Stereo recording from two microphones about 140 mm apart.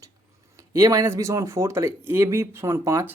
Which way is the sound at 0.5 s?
25° right (ahead or behind).